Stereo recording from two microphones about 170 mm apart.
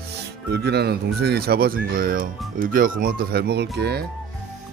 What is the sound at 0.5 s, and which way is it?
Speech, 75° right (ahead or behind).